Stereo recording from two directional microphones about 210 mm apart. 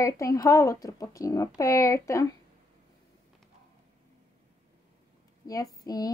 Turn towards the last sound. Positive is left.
turn(degrees=15)  # may be behind; listen again after turning